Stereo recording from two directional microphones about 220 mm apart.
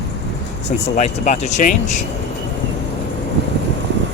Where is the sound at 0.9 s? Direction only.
30° left (ahead or behind).